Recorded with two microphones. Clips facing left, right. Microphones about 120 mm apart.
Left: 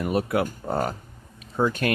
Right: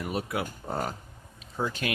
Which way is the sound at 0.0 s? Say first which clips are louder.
Left 7 dB; 55° left (ahead or behind).